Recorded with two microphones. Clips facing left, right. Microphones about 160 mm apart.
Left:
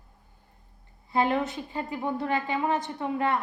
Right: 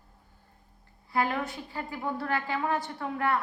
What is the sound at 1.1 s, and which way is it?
A woman's voice, 20° left (ahead or behind).